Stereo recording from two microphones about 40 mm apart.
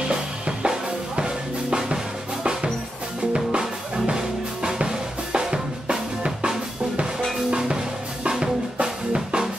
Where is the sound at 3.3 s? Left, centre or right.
Right.